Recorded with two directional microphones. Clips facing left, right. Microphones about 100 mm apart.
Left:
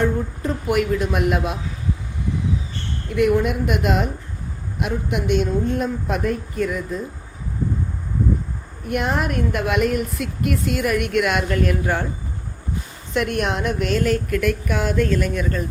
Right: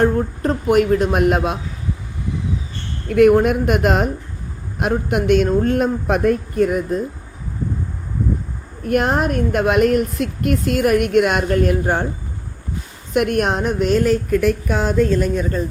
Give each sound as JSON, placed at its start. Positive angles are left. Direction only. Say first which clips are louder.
{"t": 0.0, "sound": "a woman's voice", "louder": "right 5 dB", "side_deg": -55}
{"t": 3.1, "sound": "a woman's voice", "louder": "right 6 dB", "side_deg": -50}
{"t": 8.8, "sound": "a woman's voice", "louder": "right 5 dB", "side_deg": -45}
{"t": 13.1, "sound": "a woman's voice", "louder": "right 4 dB", "side_deg": -50}